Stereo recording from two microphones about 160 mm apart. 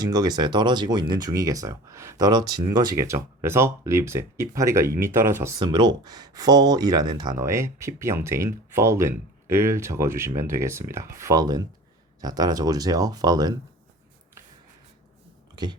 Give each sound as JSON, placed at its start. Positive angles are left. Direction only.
{"t": 0.0, "sound": "speech", "side_deg": -25}
{"t": 5.5, "sound": "speech", "side_deg": -30}
{"t": 15.5, "sound": "a sound", "side_deg": -30}